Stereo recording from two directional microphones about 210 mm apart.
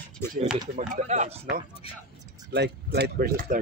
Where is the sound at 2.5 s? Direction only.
50° right (ahead or behind).